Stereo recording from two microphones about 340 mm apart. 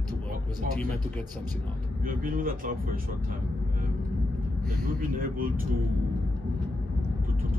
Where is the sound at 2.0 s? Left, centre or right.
Right.